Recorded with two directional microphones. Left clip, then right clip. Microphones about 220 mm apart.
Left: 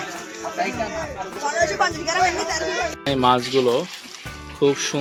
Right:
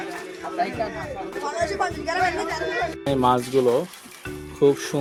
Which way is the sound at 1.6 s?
35° left (ahead or behind).